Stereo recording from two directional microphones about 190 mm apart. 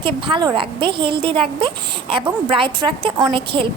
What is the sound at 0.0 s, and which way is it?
A woman's voice, 25° right (ahead or behind).